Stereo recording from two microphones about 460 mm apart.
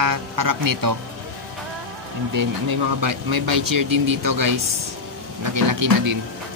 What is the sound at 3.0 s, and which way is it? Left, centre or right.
Speech, right.